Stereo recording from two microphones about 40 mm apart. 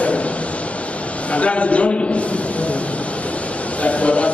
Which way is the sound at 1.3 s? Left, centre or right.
Left.